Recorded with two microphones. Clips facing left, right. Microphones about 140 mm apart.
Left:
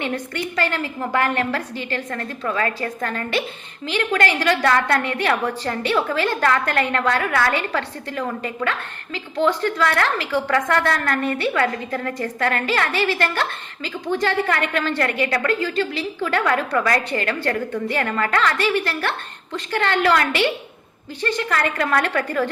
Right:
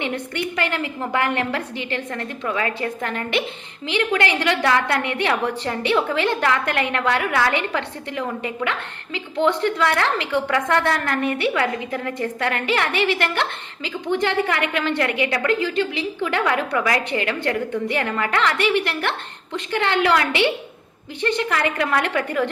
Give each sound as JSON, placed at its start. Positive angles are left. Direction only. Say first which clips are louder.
{"t": 0.0, "sound": "a woman's voice", "louder": "even", "side_deg": -20}